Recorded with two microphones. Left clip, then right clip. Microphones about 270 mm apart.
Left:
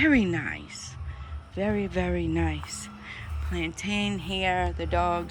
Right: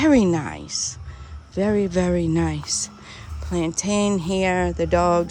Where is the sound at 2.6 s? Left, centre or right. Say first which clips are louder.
Right 11 dB; right.